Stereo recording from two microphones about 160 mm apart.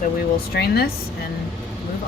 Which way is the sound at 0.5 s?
85° left.